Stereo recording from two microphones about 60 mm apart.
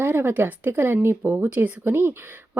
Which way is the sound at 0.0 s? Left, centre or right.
Right.